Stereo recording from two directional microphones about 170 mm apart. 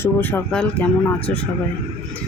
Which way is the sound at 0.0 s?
10° left (ahead or behind).